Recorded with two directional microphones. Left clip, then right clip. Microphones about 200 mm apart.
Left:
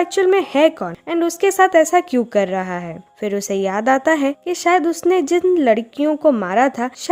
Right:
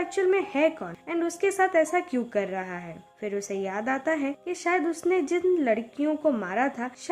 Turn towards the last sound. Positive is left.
turn(degrees=45)  # may be behind; listen again after turning